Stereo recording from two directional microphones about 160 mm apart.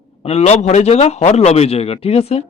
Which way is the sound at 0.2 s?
40° left (ahead or behind).